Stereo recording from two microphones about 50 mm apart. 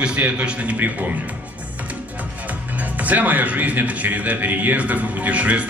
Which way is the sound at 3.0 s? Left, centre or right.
Right.